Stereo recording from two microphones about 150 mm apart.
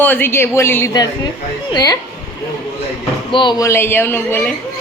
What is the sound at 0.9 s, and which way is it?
A woman's voice, 25° left (ahead or behind).